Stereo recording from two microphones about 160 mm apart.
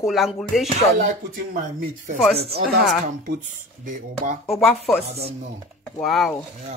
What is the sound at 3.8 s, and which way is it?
Speech, 55° right (ahead or behind).